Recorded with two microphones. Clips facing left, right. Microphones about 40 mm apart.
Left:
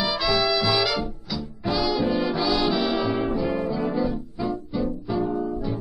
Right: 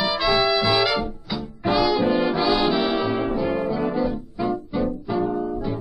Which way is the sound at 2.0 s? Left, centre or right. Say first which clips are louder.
Right 3 dB; right.